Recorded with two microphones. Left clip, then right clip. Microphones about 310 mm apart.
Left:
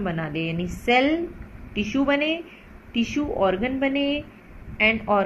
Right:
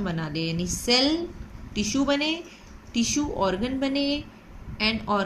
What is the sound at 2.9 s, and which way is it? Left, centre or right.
Speech, right.